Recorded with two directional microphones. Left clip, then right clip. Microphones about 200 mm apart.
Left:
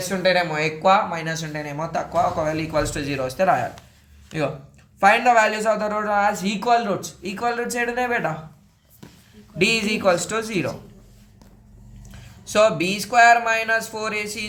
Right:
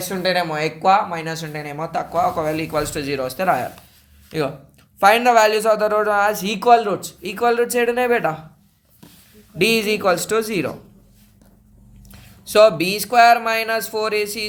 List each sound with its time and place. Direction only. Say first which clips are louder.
0.0 s speech: left 1 dB; 35° right (ahead or behind)
9.6 s speech: right 3 dB; 40° right (ahead or behind)
12.1 s speech: right 5 dB; 35° right (ahead or behind)